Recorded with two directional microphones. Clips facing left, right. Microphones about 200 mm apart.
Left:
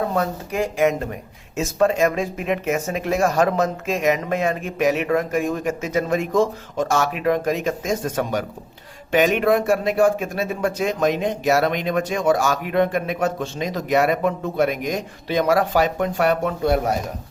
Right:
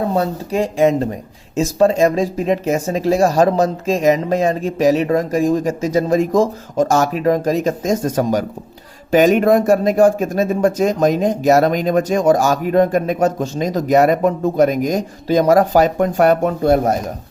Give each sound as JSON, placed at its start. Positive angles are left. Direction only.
{"t": 0.1, "sound": "speech", "side_deg": -30}